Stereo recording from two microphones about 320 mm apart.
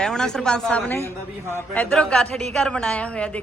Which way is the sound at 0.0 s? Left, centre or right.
Centre.